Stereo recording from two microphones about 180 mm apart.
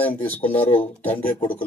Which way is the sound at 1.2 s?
50° left (ahead or behind).